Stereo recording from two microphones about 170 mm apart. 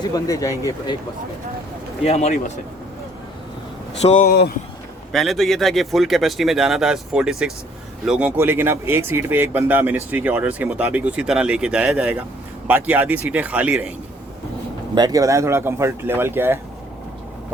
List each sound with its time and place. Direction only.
0.0 s speech: 20° left (ahead or behind)
2.0 s speech: 40° left (ahead or behind)
4.0 s speech: 45° left (ahead or behind)
4.3 s speech: 65° left (ahead or behind)
5.1 s speech: centre (ahead or behind)
14.9 s speech: 20° right (ahead or behind)